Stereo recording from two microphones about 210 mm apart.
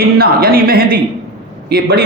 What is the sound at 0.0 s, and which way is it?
A man's voice, 45° right (ahead or behind).